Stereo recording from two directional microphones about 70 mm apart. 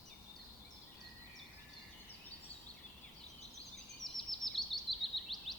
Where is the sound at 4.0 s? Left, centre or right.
Centre.